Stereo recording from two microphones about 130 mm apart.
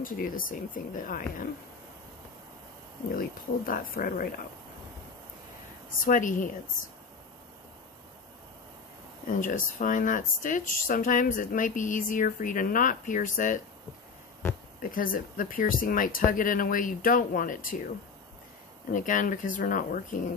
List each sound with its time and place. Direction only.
0.0 s speech: 90° left
3.6 s speech: 90° left
6.0 s speech: 90° left
9.3 s speech: 90° left
14.8 s speech: 90° left